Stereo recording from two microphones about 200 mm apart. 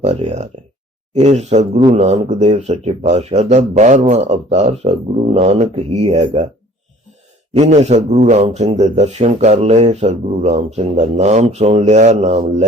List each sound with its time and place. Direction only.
0.0 s a man's voice: 35° right (ahead or behind)
7.5 s a man's voice: 30° right (ahead or behind)